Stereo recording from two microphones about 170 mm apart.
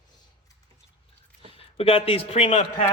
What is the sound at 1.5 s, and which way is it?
A man's voice, 35° left (ahead or behind).